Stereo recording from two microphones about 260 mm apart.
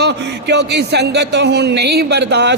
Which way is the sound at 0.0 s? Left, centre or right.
Right.